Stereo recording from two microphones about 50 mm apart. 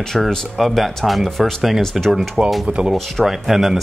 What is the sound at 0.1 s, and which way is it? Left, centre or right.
Speech, centre.